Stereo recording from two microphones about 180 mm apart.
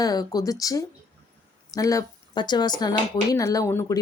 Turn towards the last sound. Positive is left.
turn(degrees=15)  # may be behind; listen again after turning